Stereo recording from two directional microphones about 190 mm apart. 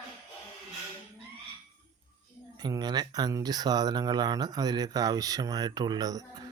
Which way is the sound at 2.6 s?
20° right (ahead or behind).